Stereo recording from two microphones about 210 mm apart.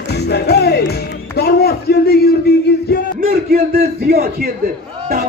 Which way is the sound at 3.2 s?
45° right (ahead or behind).